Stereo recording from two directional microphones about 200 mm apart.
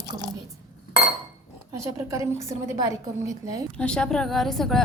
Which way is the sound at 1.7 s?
15° right (ahead or behind).